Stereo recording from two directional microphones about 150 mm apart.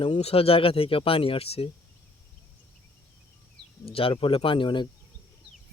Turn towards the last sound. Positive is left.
turn(degrees=30)  # may be behind; listen again after turning